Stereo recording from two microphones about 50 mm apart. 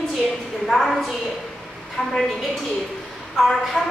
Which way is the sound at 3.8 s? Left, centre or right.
Centre.